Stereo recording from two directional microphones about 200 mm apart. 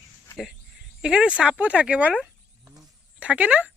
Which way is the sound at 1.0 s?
5° right (ahead or behind).